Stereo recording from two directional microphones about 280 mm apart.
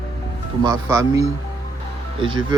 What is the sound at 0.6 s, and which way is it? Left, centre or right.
A man's voice, centre.